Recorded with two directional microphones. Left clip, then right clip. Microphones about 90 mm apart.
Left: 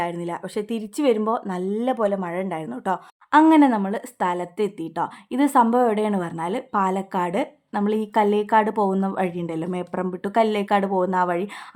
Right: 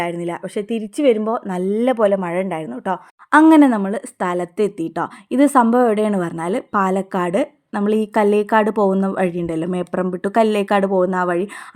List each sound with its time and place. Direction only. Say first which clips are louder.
0.3 s speech: right 4 dB; 20° right (ahead or behind)
1.5 s a woman's voice: right 6 dB; 35° right (ahead or behind)
2.1 s a woman's voice: right 6 dB; 30° right (ahead or behind)
2.6 s speech: right 2 dB; 15° right (ahead or behind)
3.5 s a woman's voice: right 4 dB; 55° right (ahead or behind)
3.8 s a woman's voice: right 3 dB; 40° right (ahead or behind)